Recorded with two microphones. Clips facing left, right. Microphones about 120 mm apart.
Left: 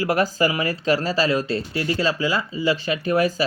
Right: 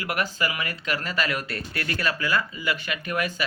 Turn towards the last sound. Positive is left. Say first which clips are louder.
# left 8 dB
turn(degrees=35)  # may be behind; listen again after turning